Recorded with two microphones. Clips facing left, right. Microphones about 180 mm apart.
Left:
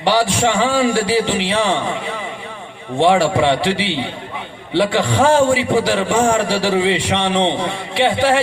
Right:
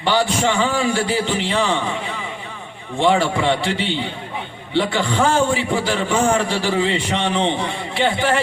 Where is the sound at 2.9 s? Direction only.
75° left (ahead or behind).